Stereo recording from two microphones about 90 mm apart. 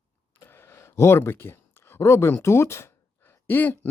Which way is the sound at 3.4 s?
20° left (ahead or behind).